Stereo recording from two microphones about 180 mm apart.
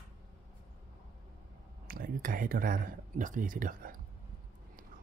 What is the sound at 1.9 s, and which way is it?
Speech, 50° right (ahead or behind).